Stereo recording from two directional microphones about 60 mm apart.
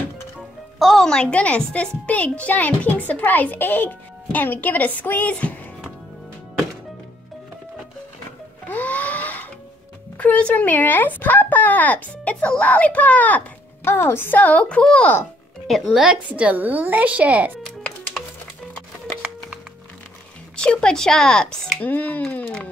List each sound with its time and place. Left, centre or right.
0.7 s a child's voice: centre; by 5.5 s left
8.6 s music: left
10.1 s a child's voice: left
13.8 s a child's voice: left; by 15.1 s centre
15.9 s speech: centre
20.5 s speech: centre
21.7 s a child's voice: left